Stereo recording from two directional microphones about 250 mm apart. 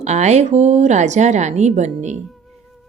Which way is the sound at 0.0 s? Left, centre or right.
Right.